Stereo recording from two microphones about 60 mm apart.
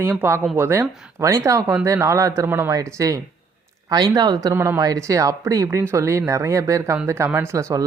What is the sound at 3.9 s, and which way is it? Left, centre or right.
Speech, right.